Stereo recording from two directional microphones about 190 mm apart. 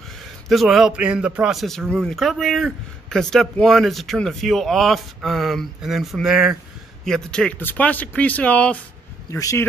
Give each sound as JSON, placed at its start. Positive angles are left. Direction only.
{"t": 0.2, "sound": "a man's voice", "side_deg": 0}